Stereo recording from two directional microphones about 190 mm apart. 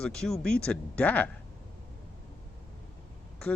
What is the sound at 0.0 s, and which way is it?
Speech, 5° left (ahead or behind).